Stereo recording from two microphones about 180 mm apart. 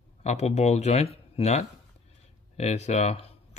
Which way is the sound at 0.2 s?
40° left (ahead or behind).